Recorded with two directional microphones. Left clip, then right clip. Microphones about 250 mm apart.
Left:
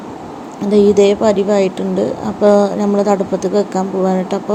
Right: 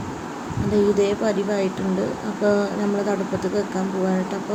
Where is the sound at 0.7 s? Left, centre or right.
Left.